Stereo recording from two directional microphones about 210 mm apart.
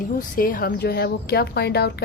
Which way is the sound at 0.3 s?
40° left (ahead or behind).